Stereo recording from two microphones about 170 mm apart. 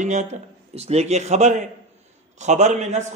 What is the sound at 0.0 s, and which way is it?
A man's voice, 45° right (ahead or behind).